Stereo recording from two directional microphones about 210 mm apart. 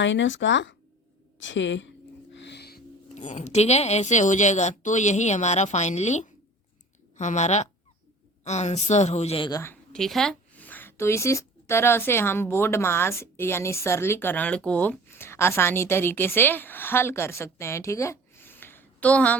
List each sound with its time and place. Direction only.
0.0 s a woman's voice: 60° left (ahead or behind); by 9.7 s 15° left (ahead or behind)
9.9 s a woman's voice: centre (ahead or behind)